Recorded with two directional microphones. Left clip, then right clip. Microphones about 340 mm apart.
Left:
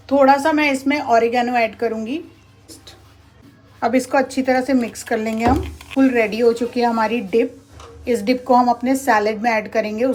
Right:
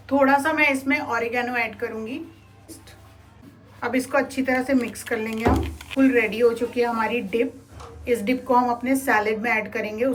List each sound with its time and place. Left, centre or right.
0.1 s speech: centre
3.8 s speech: centre